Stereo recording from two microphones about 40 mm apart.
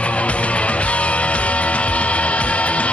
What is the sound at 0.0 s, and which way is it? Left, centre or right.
Music, left.